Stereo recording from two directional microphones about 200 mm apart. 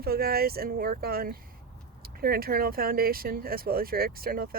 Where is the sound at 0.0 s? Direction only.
50° right (ahead or behind).